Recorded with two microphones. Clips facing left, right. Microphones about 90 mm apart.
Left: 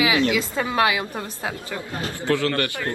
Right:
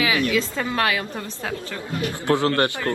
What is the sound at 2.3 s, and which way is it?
Speech, 20° right (ahead or behind).